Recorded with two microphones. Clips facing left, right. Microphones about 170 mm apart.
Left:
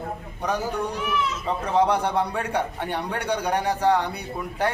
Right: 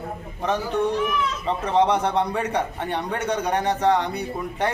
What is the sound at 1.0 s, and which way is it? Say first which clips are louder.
A man's voice: right 2 dB; 5° left (ahead or behind).